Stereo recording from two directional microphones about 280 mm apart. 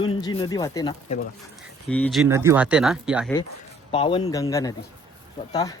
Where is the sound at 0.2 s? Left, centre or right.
Centre.